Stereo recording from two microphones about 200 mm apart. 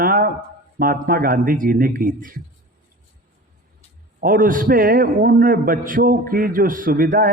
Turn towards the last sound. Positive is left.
turn(degrees=-45)  # may be behind; listen again after turning